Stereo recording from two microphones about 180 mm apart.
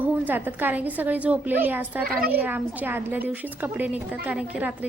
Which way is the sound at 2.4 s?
10° right (ahead or behind).